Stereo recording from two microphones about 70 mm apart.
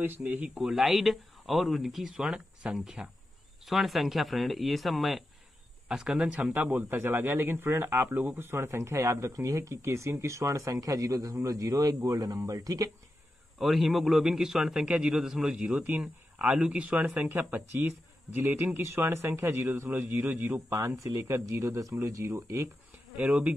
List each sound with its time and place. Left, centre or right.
0.0 s speech: right
0.6 s speech: centre
5.9 s a man's voice: centre
6.5 s speech: right
9.6 s speech: right
13.6 s a man's voice: centre; by 20.5 s right
20.7 s speech: right
23.1 s a man's voice: centre